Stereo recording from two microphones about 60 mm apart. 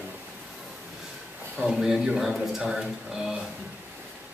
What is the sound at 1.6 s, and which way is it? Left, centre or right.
A man's voice, centre.